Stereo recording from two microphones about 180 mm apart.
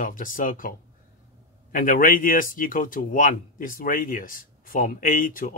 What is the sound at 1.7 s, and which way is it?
Speech, 50° left (ahead or behind).